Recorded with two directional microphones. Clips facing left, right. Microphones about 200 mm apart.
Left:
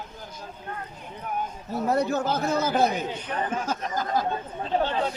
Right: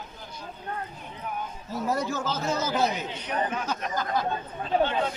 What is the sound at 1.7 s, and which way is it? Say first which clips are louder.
A man's voice: left 4 dB; 60° left (ahead or behind).